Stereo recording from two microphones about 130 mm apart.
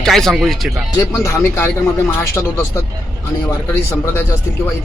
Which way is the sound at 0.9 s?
20° left (ahead or behind).